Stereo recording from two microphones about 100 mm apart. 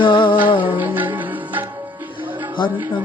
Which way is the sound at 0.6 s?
15° right (ahead or behind).